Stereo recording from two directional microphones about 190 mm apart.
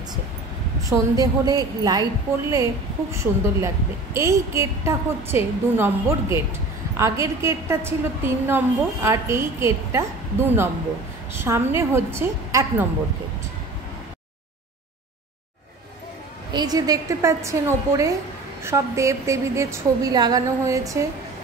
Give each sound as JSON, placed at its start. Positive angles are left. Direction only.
{"t": 0.8, "sound": "a woman's voice", "side_deg": -20}
{"t": 16.5, "sound": "a woman's voice", "side_deg": -20}